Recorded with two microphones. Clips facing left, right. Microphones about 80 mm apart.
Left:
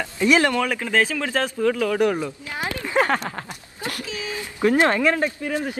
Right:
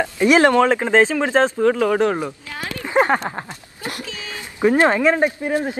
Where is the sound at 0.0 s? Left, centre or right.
Right.